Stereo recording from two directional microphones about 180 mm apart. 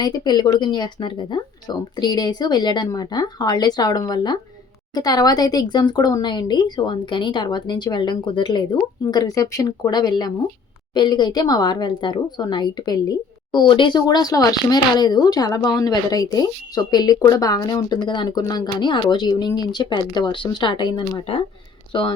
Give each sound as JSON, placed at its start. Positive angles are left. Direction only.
{"t": 0.0, "sound": "speech", "side_deg": 25}